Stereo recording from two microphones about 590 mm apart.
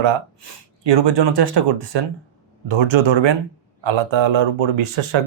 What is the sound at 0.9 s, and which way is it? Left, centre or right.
Speech, right.